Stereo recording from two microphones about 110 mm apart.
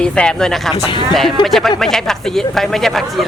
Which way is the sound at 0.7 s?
45° left (ahead or behind).